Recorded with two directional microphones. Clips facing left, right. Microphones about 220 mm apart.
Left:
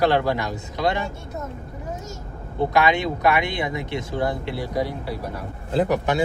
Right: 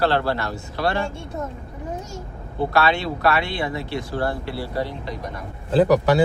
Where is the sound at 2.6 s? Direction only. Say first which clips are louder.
Left 1 dB; 15° left (ahead or behind).